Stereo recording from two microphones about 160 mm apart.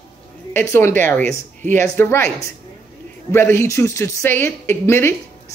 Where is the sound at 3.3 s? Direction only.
15° left (ahead or behind).